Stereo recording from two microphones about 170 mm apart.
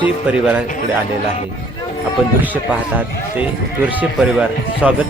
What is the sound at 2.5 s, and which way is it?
Speech, 10° right (ahead or behind).